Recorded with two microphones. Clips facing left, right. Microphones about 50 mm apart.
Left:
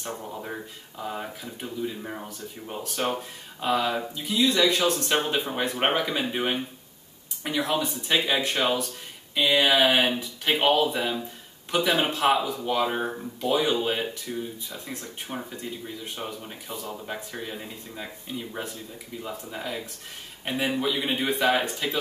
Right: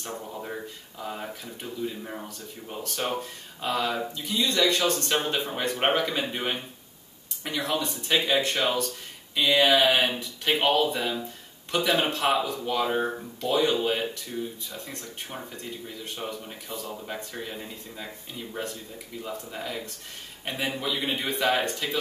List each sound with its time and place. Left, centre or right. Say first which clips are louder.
0.0 s speech: left 1 dB; centre